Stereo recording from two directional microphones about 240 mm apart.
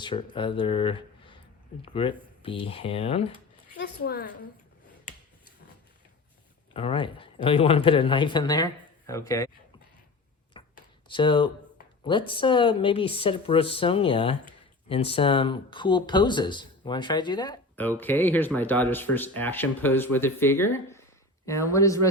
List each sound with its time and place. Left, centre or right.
0.0 s speech: left
3.8 s a woman's voice: left
6.7 s speech: left
10.5 s a sound: centre
11.1 s speech: centre